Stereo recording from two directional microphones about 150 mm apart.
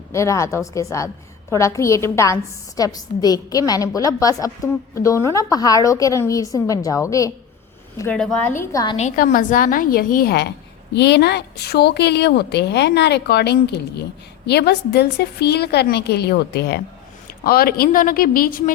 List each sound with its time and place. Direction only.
0.1 s a woman's voice: 20° left (ahead or behind)
8.1 s a woman's voice: 10° left (ahead or behind)
9.1 s a woman's voice: 70° left (ahead or behind)